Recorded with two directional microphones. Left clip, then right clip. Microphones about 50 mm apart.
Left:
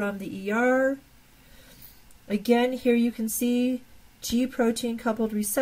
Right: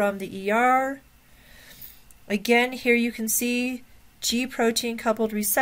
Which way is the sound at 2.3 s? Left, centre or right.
Right.